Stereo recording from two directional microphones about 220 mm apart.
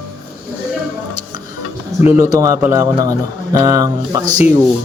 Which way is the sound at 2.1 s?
15° right (ahead or behind).